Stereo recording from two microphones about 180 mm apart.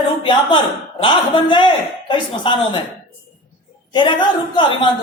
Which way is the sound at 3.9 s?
25° left (ahead or behind).